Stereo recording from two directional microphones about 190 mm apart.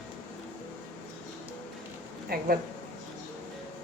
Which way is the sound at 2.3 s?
55° right (ahead or behind).